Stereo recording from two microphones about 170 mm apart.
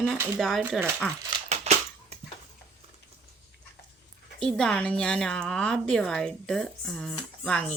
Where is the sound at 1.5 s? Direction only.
40° right (ahead or behind).